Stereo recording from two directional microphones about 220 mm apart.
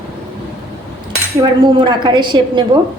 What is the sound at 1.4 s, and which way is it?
Speech, 20° right (ahead or behind).